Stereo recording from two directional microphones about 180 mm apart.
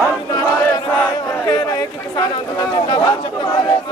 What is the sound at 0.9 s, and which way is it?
Battle cry, 5° left (ahead or behind).